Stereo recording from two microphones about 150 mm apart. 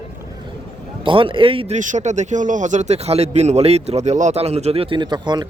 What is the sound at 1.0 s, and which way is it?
Speech, 35° right (ahead or behind).